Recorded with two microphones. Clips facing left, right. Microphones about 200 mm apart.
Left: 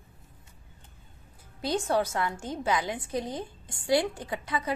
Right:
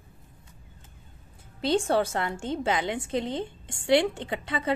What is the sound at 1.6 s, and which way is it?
A woman's voice, 25° right (ahead or behind).